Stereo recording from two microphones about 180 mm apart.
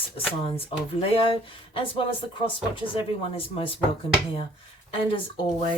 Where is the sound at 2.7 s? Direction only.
30° left (ahead or behind).